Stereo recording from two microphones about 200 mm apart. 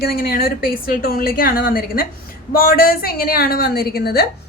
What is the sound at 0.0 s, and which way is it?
A woman's voice, 50° left (ahead or behind).